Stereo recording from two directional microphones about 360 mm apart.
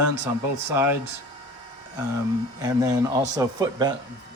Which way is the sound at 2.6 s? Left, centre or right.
Centre.